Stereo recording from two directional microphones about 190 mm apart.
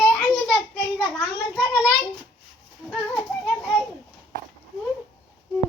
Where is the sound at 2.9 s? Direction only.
Centre (ahead or behind).